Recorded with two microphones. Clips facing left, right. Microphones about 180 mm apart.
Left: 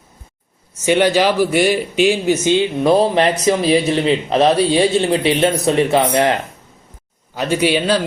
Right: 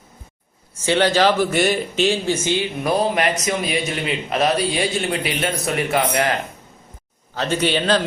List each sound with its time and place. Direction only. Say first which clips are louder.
0.9 s a man's voice: left 3 dB; 15° left (ahead or behind)
7.3 s a man's voice: left 4 dB; 10° left (ahead or behind)